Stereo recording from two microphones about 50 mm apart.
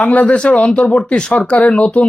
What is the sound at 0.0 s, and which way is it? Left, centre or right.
Speech, left.